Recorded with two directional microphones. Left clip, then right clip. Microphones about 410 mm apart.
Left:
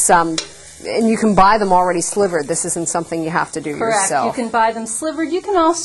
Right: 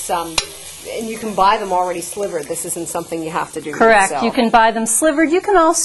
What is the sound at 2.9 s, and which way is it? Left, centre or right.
Speech, left.